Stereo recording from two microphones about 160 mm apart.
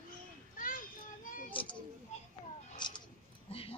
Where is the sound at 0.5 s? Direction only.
60° left (ahead or behind).